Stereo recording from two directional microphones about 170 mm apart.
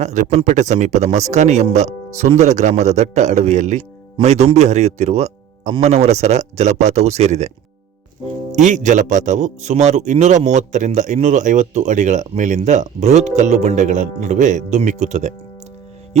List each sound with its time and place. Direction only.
0.0 s a man's voice: 45° right (ahead or behind)
8.5 s speech: 45° right (ahead or behind)